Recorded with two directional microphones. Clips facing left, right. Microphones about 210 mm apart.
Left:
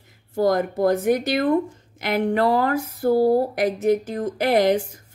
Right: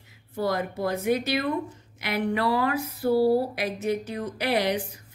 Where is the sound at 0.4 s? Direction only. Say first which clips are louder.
Left 7 dB; 45° left (ahead or behind).